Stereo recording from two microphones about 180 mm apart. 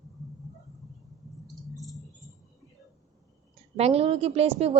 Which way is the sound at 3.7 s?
35° right (ahead or behind).